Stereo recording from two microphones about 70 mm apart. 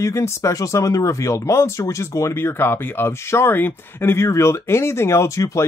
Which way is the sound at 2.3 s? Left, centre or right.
Left.